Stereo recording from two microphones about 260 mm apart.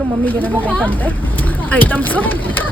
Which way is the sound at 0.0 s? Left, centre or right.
Centre.